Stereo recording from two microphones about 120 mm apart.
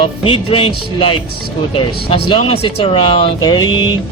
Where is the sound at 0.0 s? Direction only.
50° left (ahead or behind).